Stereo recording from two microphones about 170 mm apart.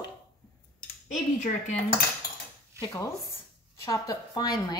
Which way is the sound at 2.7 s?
20° left (ahead or behind).